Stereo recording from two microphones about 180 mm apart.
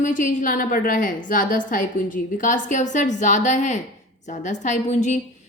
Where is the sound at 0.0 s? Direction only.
45° left (ahead or behind).